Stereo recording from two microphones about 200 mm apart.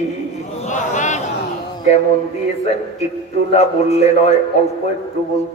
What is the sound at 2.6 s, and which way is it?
A man's voice, 35° left (ahead or behind).